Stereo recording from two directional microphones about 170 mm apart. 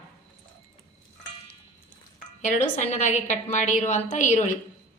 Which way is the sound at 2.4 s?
45° left (ahead or behind).